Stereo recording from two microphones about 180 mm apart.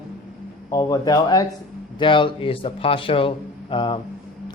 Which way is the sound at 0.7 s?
20° left (ahead or behind).